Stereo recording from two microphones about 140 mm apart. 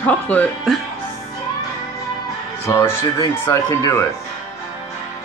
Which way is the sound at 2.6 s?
20° left (ahead or behind).